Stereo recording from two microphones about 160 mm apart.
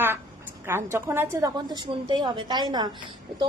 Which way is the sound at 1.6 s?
30° right (ahead or behind).